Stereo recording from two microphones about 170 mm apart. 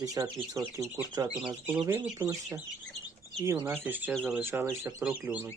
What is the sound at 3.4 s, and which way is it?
Speech, 15° right (ahead or behind).